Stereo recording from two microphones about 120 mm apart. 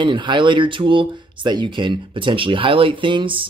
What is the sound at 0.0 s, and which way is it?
Speech, 40° right (ahead or behind).